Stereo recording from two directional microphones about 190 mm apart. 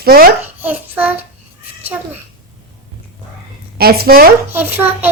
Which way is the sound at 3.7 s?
55° right (ahead or behind).